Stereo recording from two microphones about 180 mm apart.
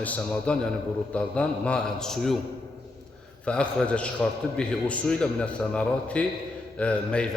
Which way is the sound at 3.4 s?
5° left (ahead or behind).